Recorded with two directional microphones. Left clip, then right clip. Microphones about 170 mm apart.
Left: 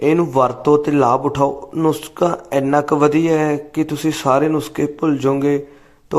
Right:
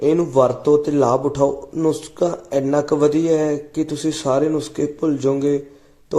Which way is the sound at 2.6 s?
5° left (ahead or behind).